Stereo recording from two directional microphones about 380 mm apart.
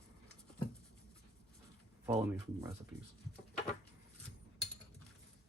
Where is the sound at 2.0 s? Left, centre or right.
Centre.